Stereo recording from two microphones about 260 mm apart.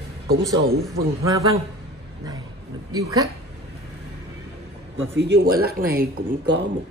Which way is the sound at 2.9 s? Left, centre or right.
Centre.